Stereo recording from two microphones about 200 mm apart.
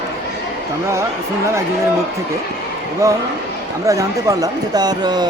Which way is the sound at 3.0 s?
15° right (ahead or behind).